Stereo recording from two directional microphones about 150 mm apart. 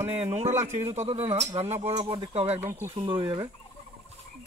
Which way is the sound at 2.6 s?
15° right (ahead or behind).